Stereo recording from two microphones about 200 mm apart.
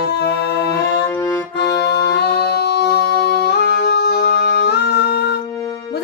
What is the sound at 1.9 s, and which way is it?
Music, 55° left (ahead or behind).